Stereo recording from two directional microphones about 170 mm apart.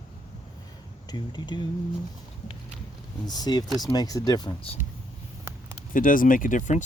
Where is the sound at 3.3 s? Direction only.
25° left (ahead or behind).